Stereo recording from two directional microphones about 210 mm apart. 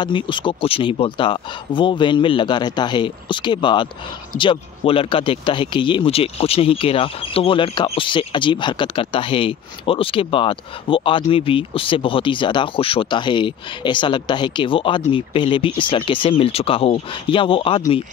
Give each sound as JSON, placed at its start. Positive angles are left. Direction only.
{"t": 0.0, "sound": "speech", "side_deg": 20}